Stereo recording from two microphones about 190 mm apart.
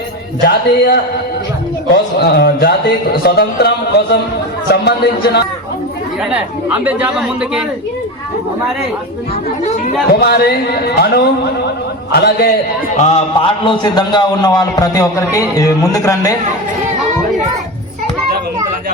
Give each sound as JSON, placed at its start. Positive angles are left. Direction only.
{"t": 0.4, "sound": "speech", "side_deg": 60}
{"t": 6.3, "sound": "speech", "side_deg": -10}
{"t": 10.1, "sound": "speech", "side_deg": 55}
{"t": 13.0, "sound": "a man's voice", "side_deg": 35}